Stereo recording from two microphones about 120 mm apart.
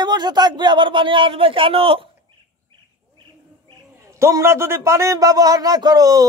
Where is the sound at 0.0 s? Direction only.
35° right (ahead or behind).